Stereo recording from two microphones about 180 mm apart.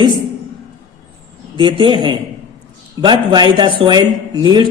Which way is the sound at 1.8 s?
25° right (ahead or behind).